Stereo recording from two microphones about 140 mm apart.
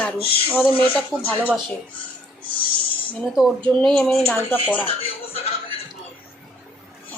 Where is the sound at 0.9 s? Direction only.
10° left (ahead or behind).